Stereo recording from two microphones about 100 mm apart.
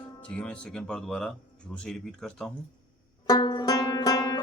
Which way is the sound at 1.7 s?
5° left (ahead or behind).